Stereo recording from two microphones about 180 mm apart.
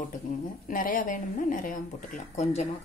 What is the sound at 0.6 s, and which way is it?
Speech, 45° left (ahead or behind).